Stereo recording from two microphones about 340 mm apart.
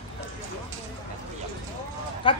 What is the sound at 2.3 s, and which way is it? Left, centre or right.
Speech, centre.